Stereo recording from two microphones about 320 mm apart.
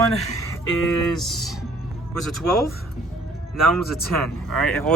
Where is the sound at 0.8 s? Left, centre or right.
Centre.